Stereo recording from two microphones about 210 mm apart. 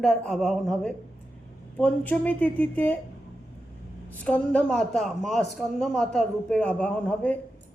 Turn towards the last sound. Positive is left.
turn(degrees=5)  # may be behind; listen again after turning